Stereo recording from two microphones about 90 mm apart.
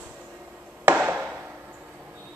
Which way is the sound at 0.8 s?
15° right (ahead or behind).